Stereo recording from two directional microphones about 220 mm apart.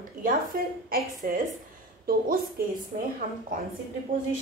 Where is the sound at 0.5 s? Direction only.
40° right (ahead or behind).